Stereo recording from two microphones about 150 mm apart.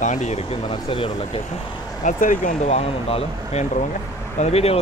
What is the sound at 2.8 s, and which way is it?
Speech, 40° left (ahead or behind).